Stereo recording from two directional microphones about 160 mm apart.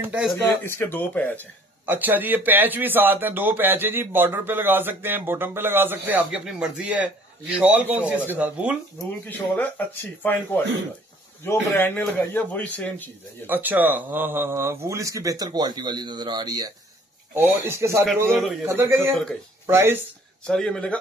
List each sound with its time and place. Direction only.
0.0 s speech: 5° right (ahead or behind)
0.5 s speech: 10° left (ahead or behind)
1.9 s speech: 10° right (ahead or behind)
9.6 s speech: 10° left (ahead or behind)
13.5 s speech: 10° right (ahead or behind)
20.4 s speech: 5° left (ahead or behind)